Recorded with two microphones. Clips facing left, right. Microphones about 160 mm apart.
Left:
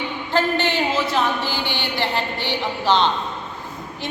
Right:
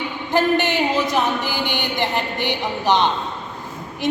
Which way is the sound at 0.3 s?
15° right (ahead or behind).